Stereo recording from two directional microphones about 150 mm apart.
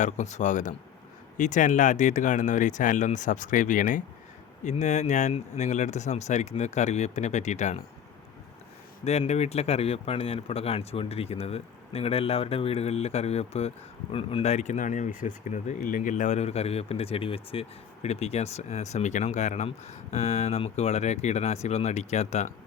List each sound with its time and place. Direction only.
0.0 s speech: 55° left (ahead or behind)
9.0 s speech: 45° left (ahead or behind)